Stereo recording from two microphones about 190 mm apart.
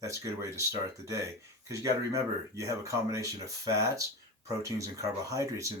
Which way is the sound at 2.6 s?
15° right (ahead or behind).